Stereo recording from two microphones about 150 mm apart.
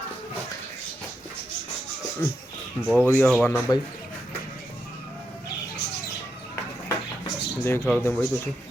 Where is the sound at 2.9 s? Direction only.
10° left (ahead or behind).